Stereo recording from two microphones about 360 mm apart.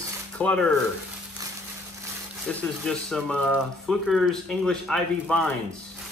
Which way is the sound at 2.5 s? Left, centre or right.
Centre.